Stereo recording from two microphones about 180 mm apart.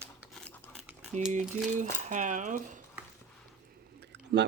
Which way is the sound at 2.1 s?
45° right (ahead or behind).